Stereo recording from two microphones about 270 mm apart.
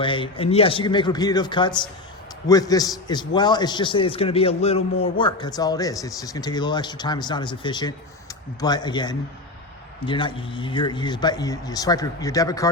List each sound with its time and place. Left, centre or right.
0.0 s a man's voice: centre